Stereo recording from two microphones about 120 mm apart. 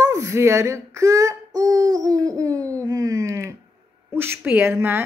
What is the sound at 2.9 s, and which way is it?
Wail, 30° right (ahead or behind).